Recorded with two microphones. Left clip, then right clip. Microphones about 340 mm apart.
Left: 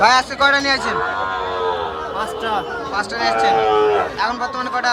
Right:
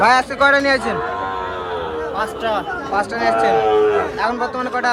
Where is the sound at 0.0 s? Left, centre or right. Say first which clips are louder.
Even; centre.